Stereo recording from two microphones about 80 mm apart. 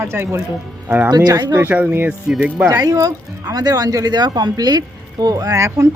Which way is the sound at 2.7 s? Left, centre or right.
Right.